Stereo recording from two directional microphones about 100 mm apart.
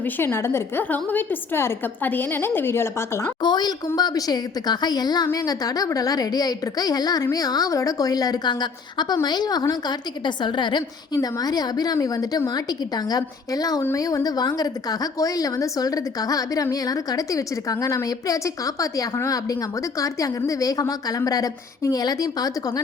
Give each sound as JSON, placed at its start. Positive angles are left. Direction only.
{"t": 0.0, "sound": "a woman's voice", "side_deg": 20}
{"t": 3.4, "sound": "a woman's voice", "side_deg": 45}